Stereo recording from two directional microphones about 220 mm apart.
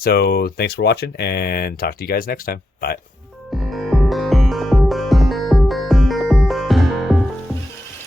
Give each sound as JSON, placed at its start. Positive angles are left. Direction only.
{"t": 0.0, "sound": "speech", "side_deg": 45}
{"t": 3.5, "sound": "music", "side_deg": 0}